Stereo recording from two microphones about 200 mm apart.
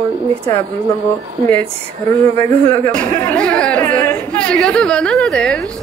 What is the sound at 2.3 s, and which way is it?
Speech, 15° left (ahead or behind).